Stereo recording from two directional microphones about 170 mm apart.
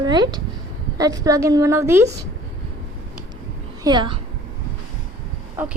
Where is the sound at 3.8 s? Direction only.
25° right (ahead or behind).